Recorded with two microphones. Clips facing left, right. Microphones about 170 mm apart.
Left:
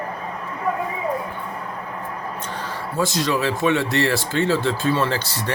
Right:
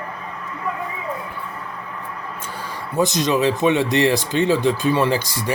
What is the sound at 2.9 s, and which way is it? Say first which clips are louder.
Speech: right 3 dB; 20° right (ahead or behind).